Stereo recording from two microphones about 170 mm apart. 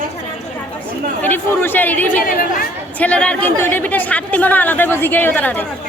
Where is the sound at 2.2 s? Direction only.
55° left (ahead or behind).